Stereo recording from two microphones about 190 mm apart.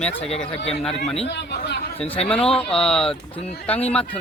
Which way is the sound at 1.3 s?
65° left (ahead or behind).